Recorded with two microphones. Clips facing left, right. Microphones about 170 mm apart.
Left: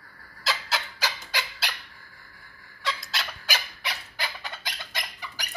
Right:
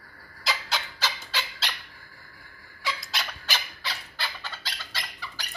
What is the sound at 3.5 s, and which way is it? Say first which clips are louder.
Bird: left 1 dB; 15° left (ahead or behind).